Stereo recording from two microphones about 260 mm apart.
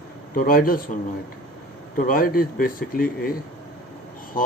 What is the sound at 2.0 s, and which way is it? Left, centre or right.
Speech, left.